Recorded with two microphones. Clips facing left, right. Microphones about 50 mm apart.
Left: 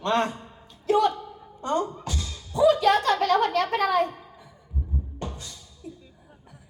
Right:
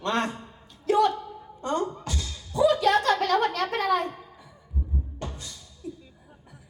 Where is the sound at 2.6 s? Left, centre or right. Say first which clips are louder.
Left 2 dB; left.